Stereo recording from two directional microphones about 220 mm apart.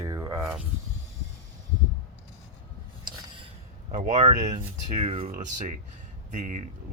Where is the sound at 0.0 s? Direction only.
15° right (ahead or behind).